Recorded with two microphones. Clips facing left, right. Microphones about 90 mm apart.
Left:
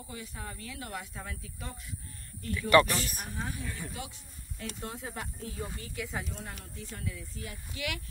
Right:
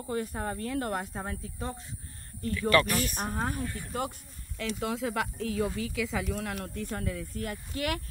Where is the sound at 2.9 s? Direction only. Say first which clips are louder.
Right 6 dB; 45° right (ahead or behind).